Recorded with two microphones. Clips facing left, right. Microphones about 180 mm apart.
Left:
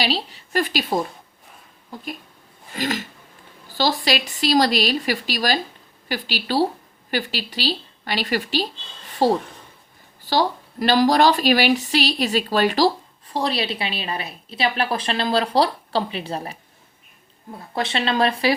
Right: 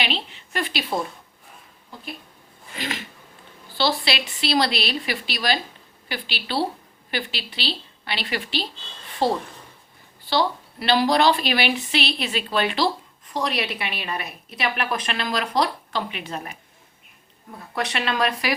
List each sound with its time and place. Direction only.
0.0 s a woman's voice: 35° left (ahead or behind)
2.7 s a woman's voice: 40° left (ahead or behind)
17.7 s speech: 30° left (ahead or behind)